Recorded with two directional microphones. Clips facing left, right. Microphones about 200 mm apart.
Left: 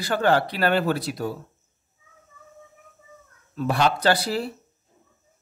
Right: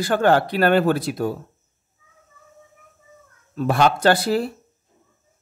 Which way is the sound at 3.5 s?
50° right (ahead or behind).